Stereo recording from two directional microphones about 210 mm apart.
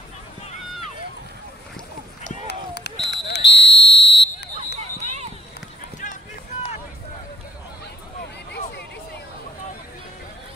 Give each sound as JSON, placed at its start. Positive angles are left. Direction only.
{"t": 2.4, "sound": "a sound", "side_deg": 50}
{"t": 3.1, "sound": "buzzer", "side_deg": 55}
{"t": 8.2, "sound": "hubbub", "side_deg": 50}